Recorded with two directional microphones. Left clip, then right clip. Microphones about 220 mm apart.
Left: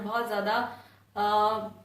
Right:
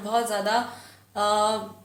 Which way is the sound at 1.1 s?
45° right (ahead or behind).